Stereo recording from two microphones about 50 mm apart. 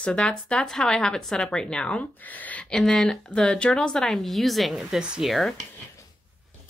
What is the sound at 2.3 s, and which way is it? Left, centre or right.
Speech, left.